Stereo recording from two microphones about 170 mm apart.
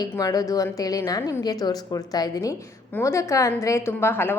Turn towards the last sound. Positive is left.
turn(degrees=15)  # may be behind; listen again after turning